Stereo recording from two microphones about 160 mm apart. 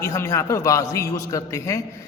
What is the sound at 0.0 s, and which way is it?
A man's voice, 20° left (ahead or behind).